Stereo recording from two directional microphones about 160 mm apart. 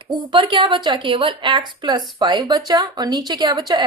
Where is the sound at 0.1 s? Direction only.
30° right (ahead or behind).